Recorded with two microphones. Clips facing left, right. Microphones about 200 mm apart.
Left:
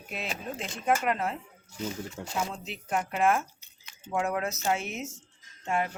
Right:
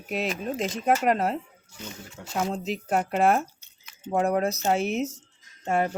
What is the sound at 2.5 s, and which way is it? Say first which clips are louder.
Speech: right 6 dB; 35° right (ahead or behind).